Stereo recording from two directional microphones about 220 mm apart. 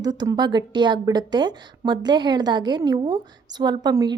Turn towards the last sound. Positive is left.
turn(degrees=-20)  # may be behind; listen again after turning